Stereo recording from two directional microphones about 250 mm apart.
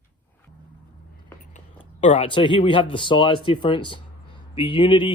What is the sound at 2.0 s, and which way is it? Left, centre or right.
A man's voice, left.